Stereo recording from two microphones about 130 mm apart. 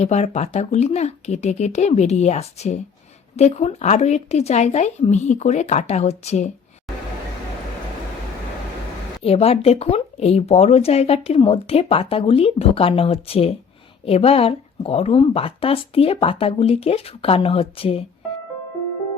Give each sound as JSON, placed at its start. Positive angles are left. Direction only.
{"t": 0.0, "sound": "speech", "side_deg": 60}
{"t": 9.2, "sound": "speech", "side_deg": 50}